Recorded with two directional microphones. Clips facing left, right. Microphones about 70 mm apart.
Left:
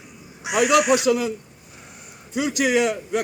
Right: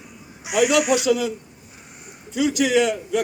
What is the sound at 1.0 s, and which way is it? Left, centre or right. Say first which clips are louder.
Speech: even; left.